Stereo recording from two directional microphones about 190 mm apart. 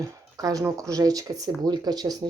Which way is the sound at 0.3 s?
20° right (ahead or behind).